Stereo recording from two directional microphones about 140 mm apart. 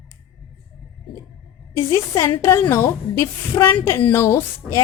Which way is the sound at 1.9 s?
25° left (ahead or behind).